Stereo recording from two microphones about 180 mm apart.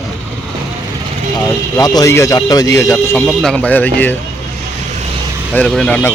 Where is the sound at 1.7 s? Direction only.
20° left (ahead or behind).